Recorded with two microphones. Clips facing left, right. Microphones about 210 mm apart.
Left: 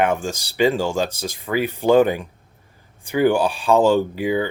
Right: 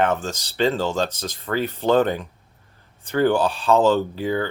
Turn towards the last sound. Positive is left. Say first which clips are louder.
# left 3 dB
turn(degrees=15)  # may be behind; listen again after turning